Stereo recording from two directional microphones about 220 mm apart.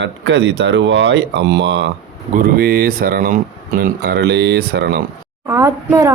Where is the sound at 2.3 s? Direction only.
40° right (ahead or behind).